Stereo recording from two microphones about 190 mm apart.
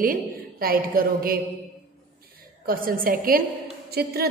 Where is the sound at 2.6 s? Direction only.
50° right (ahead or behind).